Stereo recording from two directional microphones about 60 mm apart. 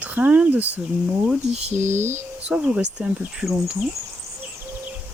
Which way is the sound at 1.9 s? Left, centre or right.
Right.